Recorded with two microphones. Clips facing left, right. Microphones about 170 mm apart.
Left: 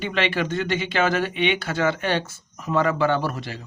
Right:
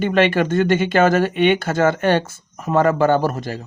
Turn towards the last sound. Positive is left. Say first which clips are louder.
# right 6 dB
turn(degrees=-45)  # may be behind; listen again after turning